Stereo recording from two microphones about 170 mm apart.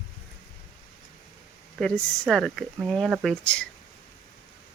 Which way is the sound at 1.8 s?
Centre (ahead or behind).